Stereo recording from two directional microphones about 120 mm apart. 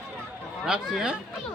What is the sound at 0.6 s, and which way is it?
Speech, 5° right (ahead or behind).